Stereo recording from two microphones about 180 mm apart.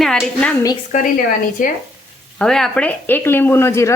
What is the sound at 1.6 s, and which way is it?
Speech, 50° left (ahead or behind).